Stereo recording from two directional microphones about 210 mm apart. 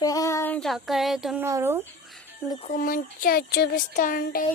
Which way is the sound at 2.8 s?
40° left (ahead or behind).